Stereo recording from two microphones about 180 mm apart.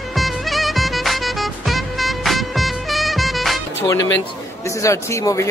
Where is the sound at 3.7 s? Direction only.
15° left (ahead or behind).